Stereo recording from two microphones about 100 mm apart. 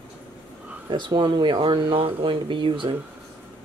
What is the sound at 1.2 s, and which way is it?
Speech, 50° right (ahead or behind).